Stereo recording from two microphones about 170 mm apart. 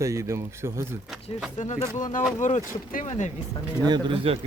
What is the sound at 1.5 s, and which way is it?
Speech, 45° left (ahead or behind).